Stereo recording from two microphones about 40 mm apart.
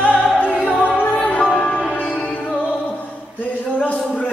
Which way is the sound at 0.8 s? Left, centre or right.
Left.